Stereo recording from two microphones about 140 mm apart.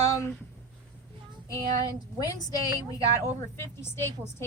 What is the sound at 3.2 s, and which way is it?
Speech, 20° left (ahead or behind).